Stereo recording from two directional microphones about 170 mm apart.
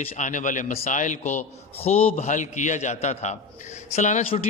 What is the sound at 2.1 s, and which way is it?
A man's voice, 45° left (ahead or behind).